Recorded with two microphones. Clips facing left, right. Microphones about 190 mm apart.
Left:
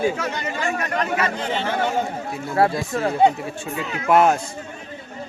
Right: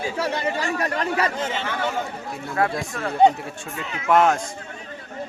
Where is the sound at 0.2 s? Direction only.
35° right (ahead or behind).